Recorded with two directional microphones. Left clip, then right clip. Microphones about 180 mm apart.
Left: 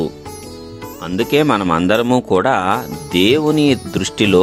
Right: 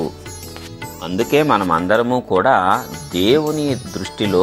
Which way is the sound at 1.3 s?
35° left (ahead or behind).